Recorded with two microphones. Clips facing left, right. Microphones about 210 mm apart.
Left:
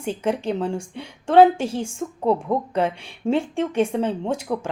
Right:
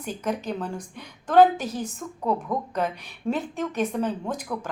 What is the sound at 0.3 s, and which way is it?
Speech, 30° left (ahead or behind).